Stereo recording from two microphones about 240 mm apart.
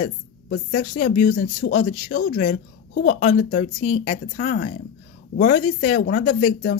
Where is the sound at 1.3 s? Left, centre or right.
Left.